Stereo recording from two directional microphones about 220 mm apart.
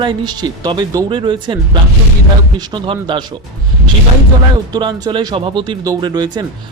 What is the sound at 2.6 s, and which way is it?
Speech, 20° right (ahead or behind).